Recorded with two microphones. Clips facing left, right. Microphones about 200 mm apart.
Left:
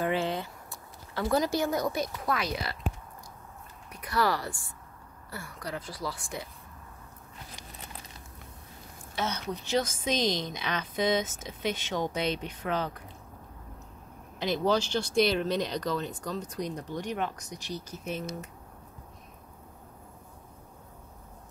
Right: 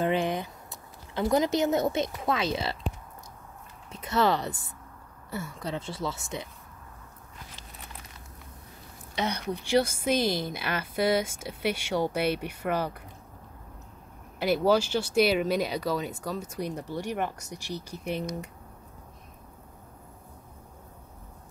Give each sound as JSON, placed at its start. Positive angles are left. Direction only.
{"t": 0.0, "sound": "a sound", "side_deg": -15}
{"t": 3.9, "sound": "speech", "side_deg": -25}
{"t": 9.1, "sound": "speech", "side_deg": -15}
{"t": 14.4, "sound": "speech", "side_deg": -10}